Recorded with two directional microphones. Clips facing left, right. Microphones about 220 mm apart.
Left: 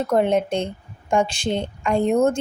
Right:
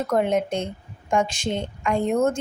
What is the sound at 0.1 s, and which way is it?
A woman's voice, 30° left (ahead or behind).